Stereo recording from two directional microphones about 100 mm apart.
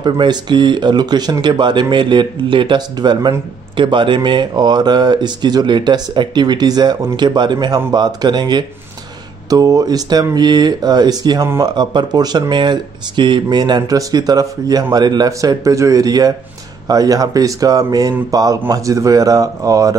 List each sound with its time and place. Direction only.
0.0 s speech: 45° right (ahead or behind)